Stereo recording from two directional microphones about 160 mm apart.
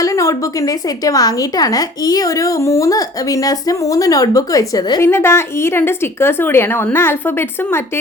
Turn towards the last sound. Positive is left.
turn(degrees=15)  # may be behind; listen again after turning